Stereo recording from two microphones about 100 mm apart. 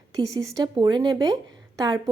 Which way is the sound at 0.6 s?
50° right (ahead or behind).